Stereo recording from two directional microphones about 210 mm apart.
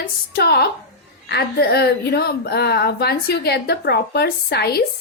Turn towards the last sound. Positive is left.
turn(degrees=50)  # may be behind; listen again after turning